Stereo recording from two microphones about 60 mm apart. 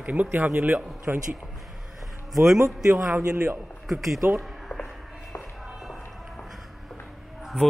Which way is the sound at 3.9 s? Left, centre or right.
Centre.